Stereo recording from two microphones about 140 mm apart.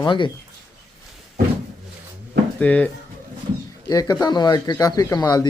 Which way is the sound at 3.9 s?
25° left (ahead or behind).